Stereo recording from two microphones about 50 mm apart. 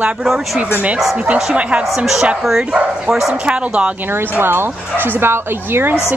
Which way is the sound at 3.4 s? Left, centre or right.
Right.